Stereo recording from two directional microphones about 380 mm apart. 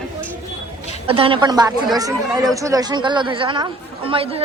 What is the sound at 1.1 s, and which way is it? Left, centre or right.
Speech, centre.